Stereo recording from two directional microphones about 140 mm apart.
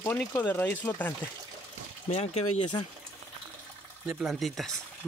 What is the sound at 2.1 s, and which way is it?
Speech, 50° left (ahead or behind).